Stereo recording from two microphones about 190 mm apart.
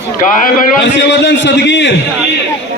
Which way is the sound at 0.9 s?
65° left (ahead or behind).